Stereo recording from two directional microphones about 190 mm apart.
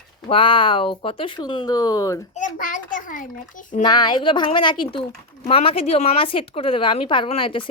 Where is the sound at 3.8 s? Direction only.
20° left (ahead or behind).